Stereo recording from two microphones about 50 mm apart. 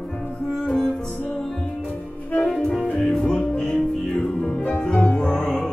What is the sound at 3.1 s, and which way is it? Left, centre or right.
Music, centre.